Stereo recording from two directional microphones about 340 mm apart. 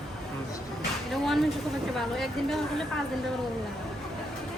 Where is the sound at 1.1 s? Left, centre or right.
Centre.